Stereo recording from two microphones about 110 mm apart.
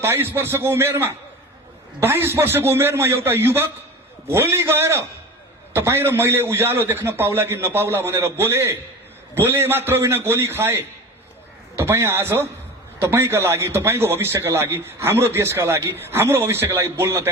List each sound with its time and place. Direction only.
0.0 s a man's voice: 20° right (ahead or behind)